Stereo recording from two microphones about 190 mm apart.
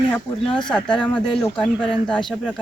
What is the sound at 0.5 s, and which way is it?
Speech, 5° left (ahead or behind).